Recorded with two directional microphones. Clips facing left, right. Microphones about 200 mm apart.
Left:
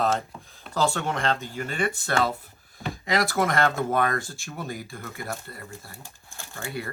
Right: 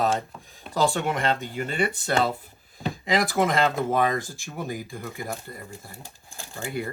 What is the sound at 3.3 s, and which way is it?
Speech, 15° right (ahead or behind).